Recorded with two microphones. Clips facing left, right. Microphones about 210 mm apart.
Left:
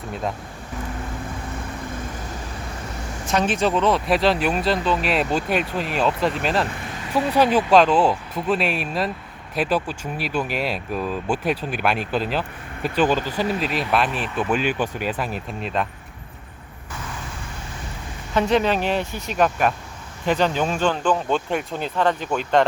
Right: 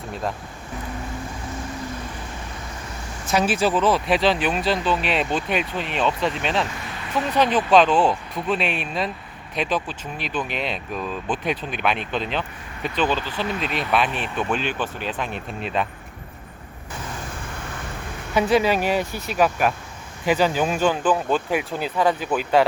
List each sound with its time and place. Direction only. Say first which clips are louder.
3.3 s speech: even; 5° right (ahead or behind)
13.1 s speech: left 4 dB; 45° left (ahead or behind)
13.6 s speech: left 1 dB; centre (ahead or behind)
18.3 s speech: even; 10° right (ahead or behind)